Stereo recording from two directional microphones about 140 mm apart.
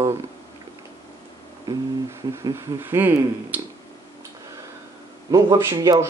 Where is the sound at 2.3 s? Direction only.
25° right (ahead or behind).